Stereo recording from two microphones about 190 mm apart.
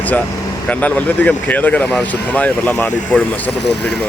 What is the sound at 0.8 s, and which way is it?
Speech, 10° left (ahead or behind).